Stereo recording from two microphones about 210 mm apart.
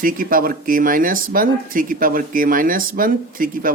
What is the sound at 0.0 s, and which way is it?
Speech, 40° right (ahead or behind).